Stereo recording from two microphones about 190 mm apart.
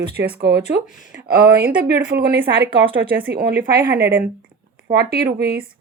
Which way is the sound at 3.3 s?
60° right (ahead or behind).